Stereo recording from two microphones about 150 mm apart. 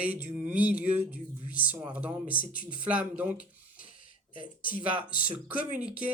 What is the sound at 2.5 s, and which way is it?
Speech, 70° left (ahead or behind).